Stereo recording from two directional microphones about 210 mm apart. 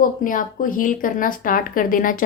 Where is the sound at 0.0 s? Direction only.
40° left (ahead or behind).